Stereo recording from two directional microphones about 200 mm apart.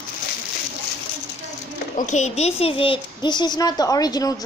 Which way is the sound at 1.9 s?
35° left (ahead or behind).